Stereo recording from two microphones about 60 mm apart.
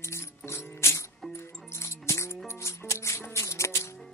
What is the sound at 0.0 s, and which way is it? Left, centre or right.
Music, left.